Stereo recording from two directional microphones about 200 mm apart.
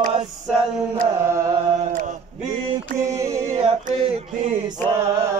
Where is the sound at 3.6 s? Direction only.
30° right (ahead or behind).